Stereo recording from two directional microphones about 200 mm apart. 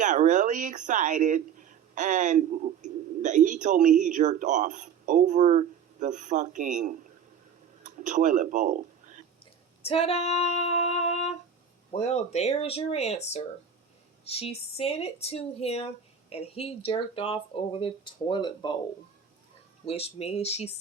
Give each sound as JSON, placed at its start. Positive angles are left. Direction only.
{"t": 0.0, "sound": "speech", "side_deg": -40}
{"t": 9.8, "sound": "female singing", "side_deg": 30}
{"t": 11.9, "sound": "speech", "side_deg": 35}
{"t": 19.8, "sound": "speech", "side_deg": 30}